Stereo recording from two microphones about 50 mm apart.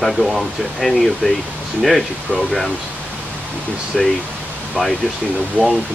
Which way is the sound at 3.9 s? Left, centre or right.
Centre.